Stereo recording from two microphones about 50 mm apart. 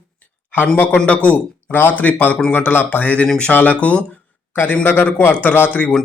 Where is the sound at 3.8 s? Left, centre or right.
Left.